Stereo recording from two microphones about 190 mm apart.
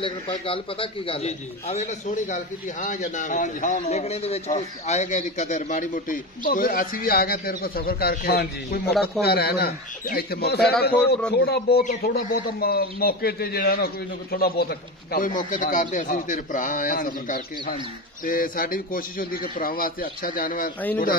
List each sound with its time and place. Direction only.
0.0 s a man's voice: 30° left (ahead or behind); by 20.7 s 45° left (ahead or behind)